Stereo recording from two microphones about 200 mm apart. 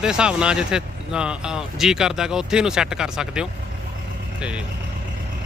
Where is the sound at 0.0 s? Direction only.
5° right (ahead or behind).